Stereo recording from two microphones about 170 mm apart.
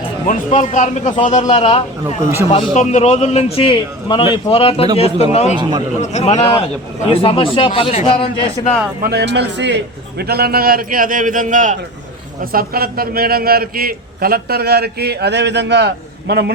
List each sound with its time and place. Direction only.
0.3 s a man's voice: 45° left (ahead or behind)
9.0 s a man's voice: 70° right (ahead or behind); by 11.8 s 45° right (ahead or behind)
12.5 s a man's voice: 60° right (ahead or behind)